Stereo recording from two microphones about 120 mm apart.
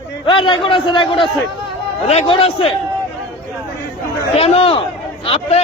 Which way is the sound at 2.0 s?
60° left (ahead or behind).